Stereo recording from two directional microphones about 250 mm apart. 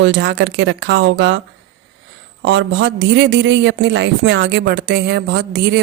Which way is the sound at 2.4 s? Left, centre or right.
Right.